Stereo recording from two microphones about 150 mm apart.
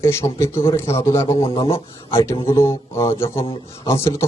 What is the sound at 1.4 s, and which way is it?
Speech, 40° left (ahead or behind).